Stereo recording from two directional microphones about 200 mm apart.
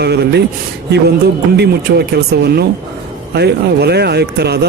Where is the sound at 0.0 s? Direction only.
55° right (ahead or behind).